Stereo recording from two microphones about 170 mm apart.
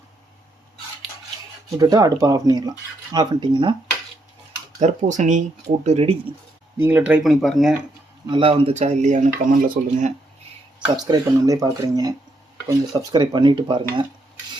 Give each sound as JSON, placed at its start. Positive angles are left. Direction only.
{"t": 1.8, "sound": "speech", "side_deg": -20}
{"t": 4.8, "sound": "speech", "side_deg": -45}
{"t": 6.7, "sound": "speech", "side_deg": -10}
{"t": 8.3, "sound": "speech", "side_deg": -30}
{"t": 10.9, "sound": "speech", "side_deg": -25}